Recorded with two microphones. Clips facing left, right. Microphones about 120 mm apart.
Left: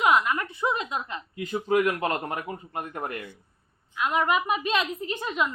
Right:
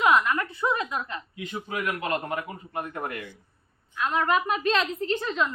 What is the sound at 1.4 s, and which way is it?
A man's voice, 35° left (ahead or behind).